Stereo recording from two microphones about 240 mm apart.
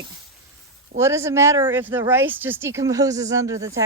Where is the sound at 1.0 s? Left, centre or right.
Centre.